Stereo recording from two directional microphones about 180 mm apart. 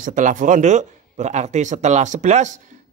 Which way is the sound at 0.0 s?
45° right (ahead or behind).